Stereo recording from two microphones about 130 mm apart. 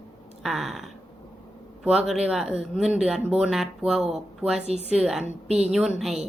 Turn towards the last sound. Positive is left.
turn(degrees=-5)  # may be behind; listen again after turning